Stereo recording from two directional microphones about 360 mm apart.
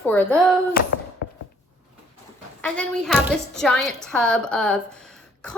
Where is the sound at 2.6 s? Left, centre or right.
Centre.